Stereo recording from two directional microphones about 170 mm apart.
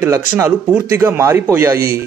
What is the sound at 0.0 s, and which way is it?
A man's voice, 15° right (ahead or behind).